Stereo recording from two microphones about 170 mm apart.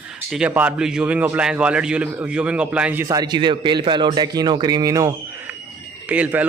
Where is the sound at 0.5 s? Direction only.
10° right (ahead or behind).